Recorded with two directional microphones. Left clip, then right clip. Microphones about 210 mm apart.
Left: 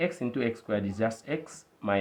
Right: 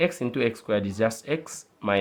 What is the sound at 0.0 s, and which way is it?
Speech, 40° right (ahead or behind).